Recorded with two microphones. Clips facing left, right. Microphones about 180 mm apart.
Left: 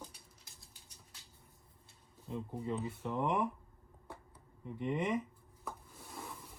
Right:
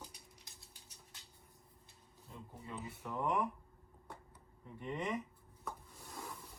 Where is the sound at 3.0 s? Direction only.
15° left (ahead or behind).